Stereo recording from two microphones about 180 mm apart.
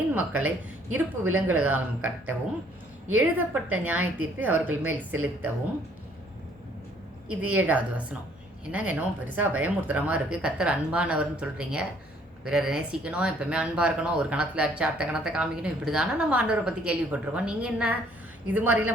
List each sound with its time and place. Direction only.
0.1 s speech: 10° right (ahead or behind)
7.5 s speech: 10° right (ahead or behind)